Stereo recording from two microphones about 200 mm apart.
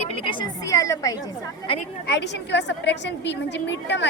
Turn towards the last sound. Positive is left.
turn(degrees=60)  # may be behind; listen again after turning